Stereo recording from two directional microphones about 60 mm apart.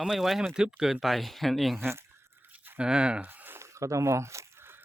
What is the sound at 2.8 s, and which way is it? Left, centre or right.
Speech, centre.